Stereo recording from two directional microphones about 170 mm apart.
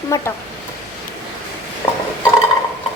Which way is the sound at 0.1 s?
15° left (ahead or behind).